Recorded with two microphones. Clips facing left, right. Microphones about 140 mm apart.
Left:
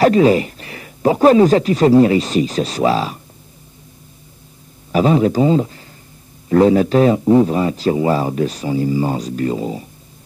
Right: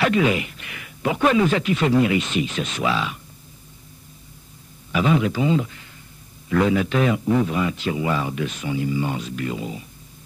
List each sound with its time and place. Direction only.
0.0 s speech: 35° left (ahead or behind)
4.9 s speech: 35° left (ahead or behind)